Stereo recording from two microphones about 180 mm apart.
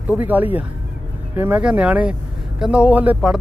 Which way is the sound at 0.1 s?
10° right (ahead or behind).